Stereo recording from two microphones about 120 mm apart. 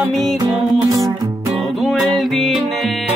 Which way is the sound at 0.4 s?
30° right (ahead or behind).